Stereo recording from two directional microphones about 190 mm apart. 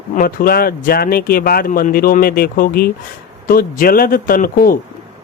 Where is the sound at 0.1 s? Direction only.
45° left (ahead or behind).